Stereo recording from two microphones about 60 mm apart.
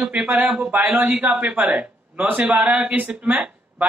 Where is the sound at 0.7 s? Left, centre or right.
Right.